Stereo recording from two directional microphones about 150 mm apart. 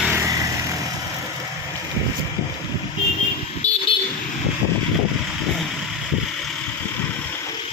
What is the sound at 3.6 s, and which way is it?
Vehicle, 50° left (ahead or behind).